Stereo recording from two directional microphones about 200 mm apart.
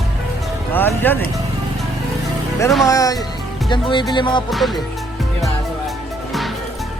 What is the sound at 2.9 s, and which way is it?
Speech, 15° left (ahead or behind).